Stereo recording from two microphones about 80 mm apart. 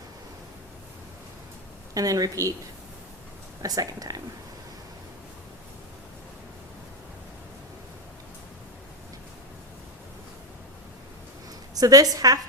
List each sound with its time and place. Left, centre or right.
1.9 s a woman's voice: right
3.6 s a woman's voice: right
11.7 s a woman's voice: right